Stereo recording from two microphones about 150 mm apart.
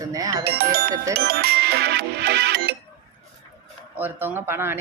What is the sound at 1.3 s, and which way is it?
Music, 90° right.